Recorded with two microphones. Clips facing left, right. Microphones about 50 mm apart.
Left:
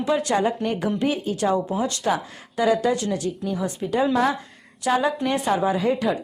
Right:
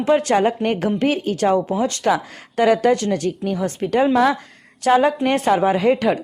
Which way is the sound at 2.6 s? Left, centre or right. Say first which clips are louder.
Right 5 dB; right.